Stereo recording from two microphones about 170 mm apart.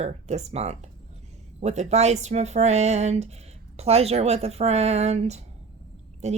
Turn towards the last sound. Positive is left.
turn(degrees=-40)  # may be behind; listen again after turning